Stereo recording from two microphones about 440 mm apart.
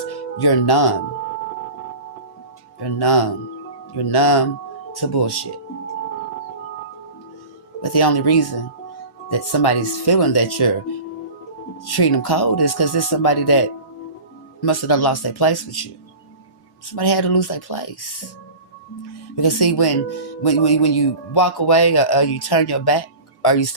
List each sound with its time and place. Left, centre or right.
0.0 s speech: left
2.8 s speech: left
7.8 s speech: left
11.9 s speech: left
16.9 s speech: left
19.4 s speech: left